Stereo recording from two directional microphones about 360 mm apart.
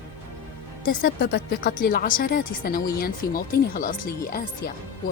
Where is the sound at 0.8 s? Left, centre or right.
Left.